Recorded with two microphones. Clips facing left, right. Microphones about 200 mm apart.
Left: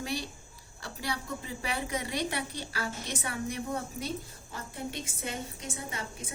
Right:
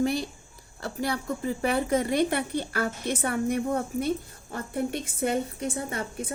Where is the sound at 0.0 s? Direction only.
50° right (ahead or behind).